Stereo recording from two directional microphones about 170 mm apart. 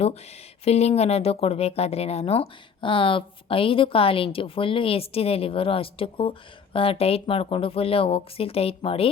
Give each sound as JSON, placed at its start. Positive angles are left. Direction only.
{"t": 0.6, "sound": "speech", "side_deg": 40}